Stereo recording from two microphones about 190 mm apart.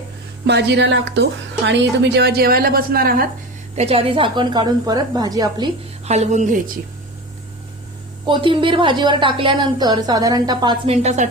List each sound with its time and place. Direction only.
0.4 s speech: 65° right (ahead or behind)
3.8 s a woman's voice: 30° right (ahead or behind)
6.1 s a woman's voice: 35° right (ahead or behind)
8.3 s a woman's voice: 25° right (ahead or behind)